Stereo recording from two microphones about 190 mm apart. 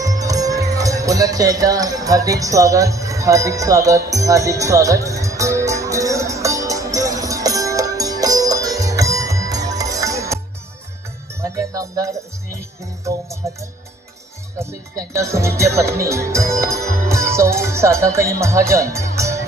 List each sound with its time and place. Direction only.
0.0 s music: 20° right (ahead or behind)
14.6 s speech: 15° right (ahead or behind)